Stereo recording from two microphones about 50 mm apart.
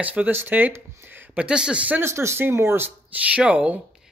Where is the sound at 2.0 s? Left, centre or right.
Right.